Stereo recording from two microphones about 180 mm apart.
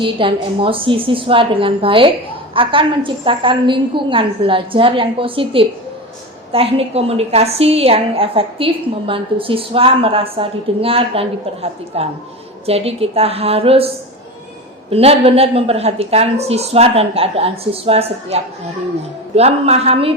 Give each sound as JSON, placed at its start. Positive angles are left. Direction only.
{"t": 0.0, "sound": "a woman's voice", "side_deg": -30}
{"t": 19.4, "sound": "a woman's voice", "side_deg": -35}